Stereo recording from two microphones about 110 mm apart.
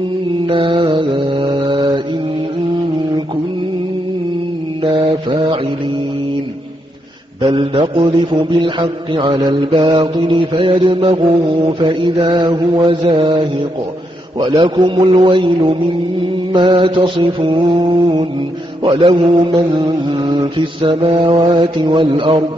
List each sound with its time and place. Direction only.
0.5 s mantra: 50° right (ahead or behind)
4.8 s mantra: 45° right (ahead or behind)
7.5 s mantra: 50° right (ahead or behind)